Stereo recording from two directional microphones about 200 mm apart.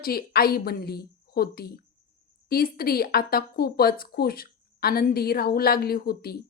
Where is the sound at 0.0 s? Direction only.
50° left (ahead or behind).